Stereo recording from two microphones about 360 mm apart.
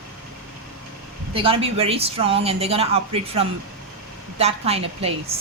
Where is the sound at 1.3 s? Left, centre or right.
Centre.